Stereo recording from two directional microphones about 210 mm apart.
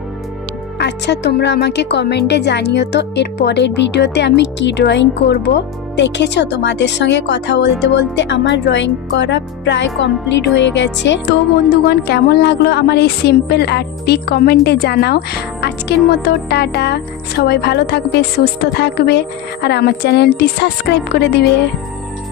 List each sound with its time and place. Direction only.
0.8 s speech: 55° left (ahead or behind)